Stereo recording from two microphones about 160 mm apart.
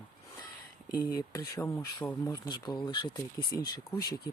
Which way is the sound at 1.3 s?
15° left (ahead or behind).